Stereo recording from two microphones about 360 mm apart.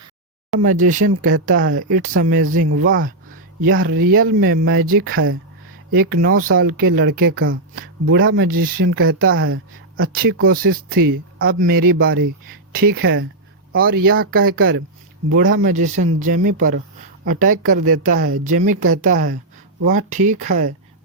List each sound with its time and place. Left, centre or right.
0.6 s speech: right